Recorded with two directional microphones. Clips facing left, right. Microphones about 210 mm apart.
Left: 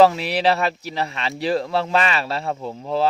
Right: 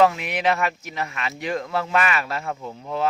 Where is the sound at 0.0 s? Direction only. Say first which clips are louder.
Left 4 dB; 35° left (ahead or behind).